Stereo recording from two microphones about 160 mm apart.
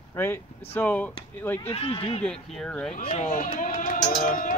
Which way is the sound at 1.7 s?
40° left (ahead or behind).